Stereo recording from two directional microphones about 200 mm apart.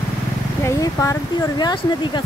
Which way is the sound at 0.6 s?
15° left (ahead or behind).